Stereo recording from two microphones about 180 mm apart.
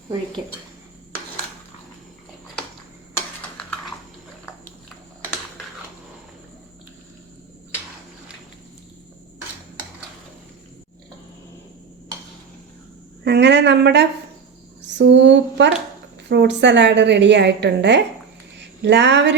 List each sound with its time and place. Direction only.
13.2 s a woman's voice: 70° right (ahead or behind)